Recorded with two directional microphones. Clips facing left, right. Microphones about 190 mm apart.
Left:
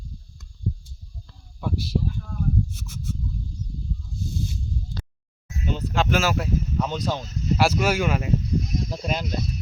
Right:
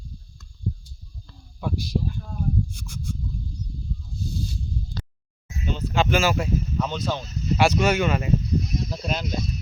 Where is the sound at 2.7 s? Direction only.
5° left (ahead or behind).